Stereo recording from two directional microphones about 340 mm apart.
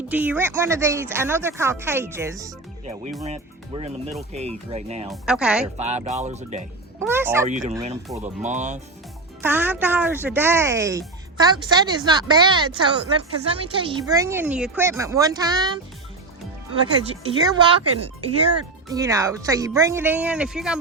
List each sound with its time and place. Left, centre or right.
0.1 s speech: centre
5.0 s speech: centre
5.6 s speech: centre
7.0 s speech: centre
7.4 s speech: right
8.0 s speech: centre
8.4 s speech: right
9.4 s speech: centre
17.1 s speech: centre
18.9 s speech: centre